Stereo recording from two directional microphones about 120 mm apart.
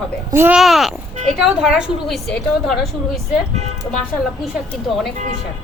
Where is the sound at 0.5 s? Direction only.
Centre (ahead or behind).